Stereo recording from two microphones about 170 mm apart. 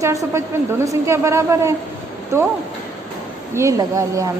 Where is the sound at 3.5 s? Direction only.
20° right (ahead or behind).